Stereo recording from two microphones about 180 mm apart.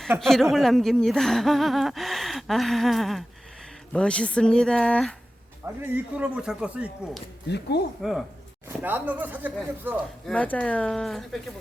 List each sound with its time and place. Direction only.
0.2 s speech: centre (ahead or behind)
5.6 s speech: 10° right (ahead or behind)
7.4 s speech: 70° left (ahead or behind)
8.0 s speech: centre (ahead or behind)
10.2 s speech: 5° left (ahead or behind)